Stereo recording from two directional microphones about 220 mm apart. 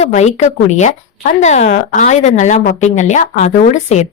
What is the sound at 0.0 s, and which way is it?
A woman's voice, 30° left (ahead or behind).